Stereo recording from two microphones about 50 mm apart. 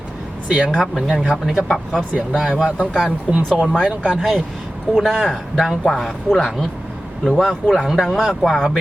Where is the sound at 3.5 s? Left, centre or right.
Centre.